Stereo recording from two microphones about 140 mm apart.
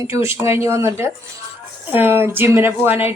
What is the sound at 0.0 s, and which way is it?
Speech, 20° right (ahead or behind).